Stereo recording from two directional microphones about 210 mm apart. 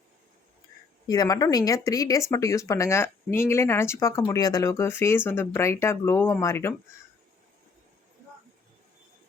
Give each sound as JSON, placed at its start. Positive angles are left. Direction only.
{"t": 1.0, "sound": "speech", "side_deg": 15}